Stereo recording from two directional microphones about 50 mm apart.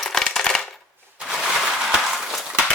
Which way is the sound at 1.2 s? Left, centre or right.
Centre.